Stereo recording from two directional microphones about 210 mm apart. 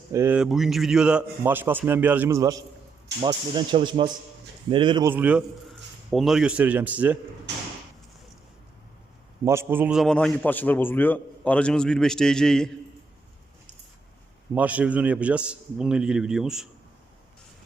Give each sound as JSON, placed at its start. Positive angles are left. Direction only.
{"t": 0.1, "sound": "a man's voice", "side_deg": -10}
{"t": 5.1, "sound": "a man's voice", "side_deg": -5}
{"t": 9.4, "sound": "a man's voice", "side_deg": -15}
{"t": 14.5, "sound": "a man's voice", "side_deg": -5}